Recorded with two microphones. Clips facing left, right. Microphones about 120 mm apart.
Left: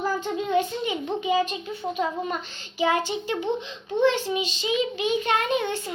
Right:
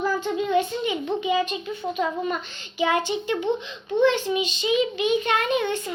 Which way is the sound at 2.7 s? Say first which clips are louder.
Right 1 dB; 35° left (ahead or behind).